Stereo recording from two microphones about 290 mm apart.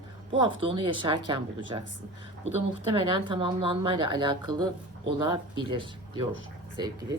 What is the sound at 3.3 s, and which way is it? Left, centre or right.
Speech, centre.